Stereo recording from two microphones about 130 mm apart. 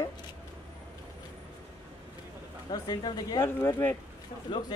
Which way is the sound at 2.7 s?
35° left (ahead or behind).